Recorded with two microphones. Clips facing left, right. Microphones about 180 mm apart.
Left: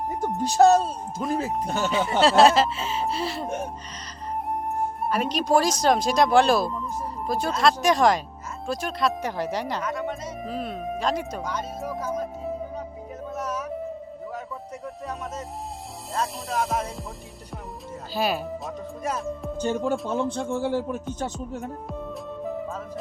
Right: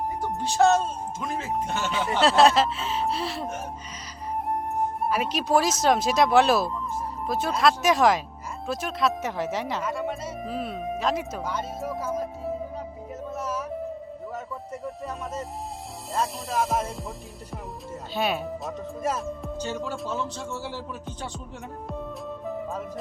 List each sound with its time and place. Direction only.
0.4 s speech: 40° left (ahead or behind)
1.9 s speech: centre (ahead or behind)
4.9 s speech: 5° right (ahead or behind)
13.3 s music: 5° right (ahead or behind)
14.8 s speech: centre (ahead or behind)
18.1 s speech: centre (ahead or behind)
19.5 s speech: 50° left (ahead or behind)